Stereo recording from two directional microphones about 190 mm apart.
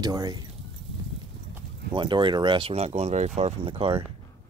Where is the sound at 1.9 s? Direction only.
25° right (ahead or behind).